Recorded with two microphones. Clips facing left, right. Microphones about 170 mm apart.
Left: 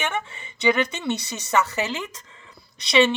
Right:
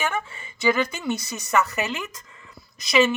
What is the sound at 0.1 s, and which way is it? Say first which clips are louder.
Speech: even; 25° left (ahead or behind).